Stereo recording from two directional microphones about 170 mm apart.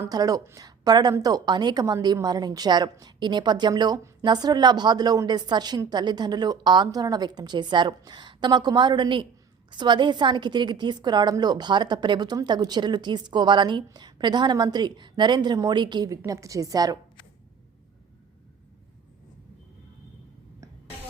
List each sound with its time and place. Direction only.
0.0 s a woman's voice: 20° right (ahead or behind)